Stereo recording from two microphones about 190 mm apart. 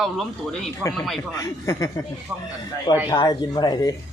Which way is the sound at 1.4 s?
15° left (ahead or behind).